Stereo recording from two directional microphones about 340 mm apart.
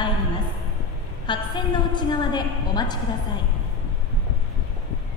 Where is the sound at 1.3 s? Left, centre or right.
Centre.